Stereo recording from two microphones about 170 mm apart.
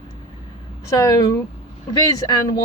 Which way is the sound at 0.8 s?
20° left (ahead or behind).